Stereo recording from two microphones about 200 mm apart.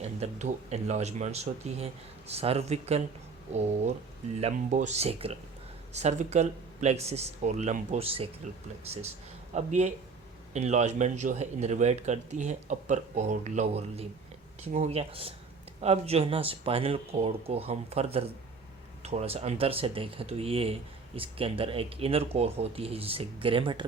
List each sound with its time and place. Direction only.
0.0 s speech: 35° right (ahead or behind)
9.6 s speech: 35° right (ahead or behind)